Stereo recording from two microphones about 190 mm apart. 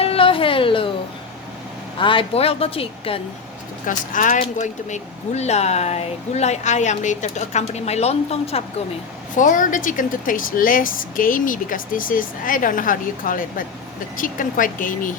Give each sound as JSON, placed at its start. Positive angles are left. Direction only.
{"t": 0.0, "sound": "music", "side_deg": 30}
{"t": 2.0, "sound": "a woman's voice", "side_deg": 25}
{"t": 3.8, "sound": "speech", "side_deg": 45}
{"t": 9.3, "sound": "speech", "side_deg": 45}